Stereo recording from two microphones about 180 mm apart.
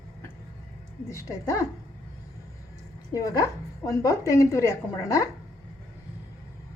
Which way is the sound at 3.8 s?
20° left (ahead or behind).